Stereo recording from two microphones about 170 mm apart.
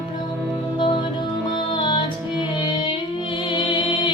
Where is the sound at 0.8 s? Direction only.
30° left (ahead or behind).